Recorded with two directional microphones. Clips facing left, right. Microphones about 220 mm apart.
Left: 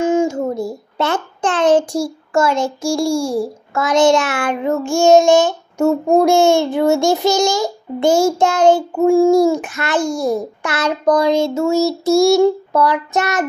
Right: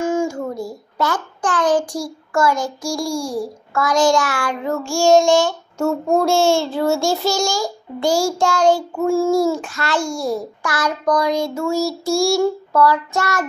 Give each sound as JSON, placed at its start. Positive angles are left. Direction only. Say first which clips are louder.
{"t": 0.0, "sound": "a child's voice", "louder": "left 4 dB", "side_deg": 20}